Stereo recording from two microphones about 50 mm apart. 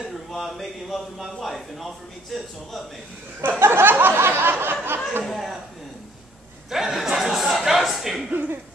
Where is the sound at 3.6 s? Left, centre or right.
Right.